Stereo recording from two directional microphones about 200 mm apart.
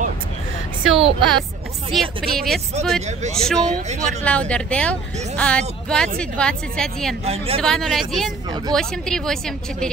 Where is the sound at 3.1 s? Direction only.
35° right (ahead or behind).